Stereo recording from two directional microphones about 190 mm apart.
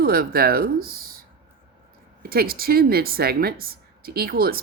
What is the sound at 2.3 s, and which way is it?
Speech, 50° right (ahead or behind).